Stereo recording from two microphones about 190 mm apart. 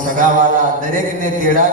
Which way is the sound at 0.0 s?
45° right (ahead or behind).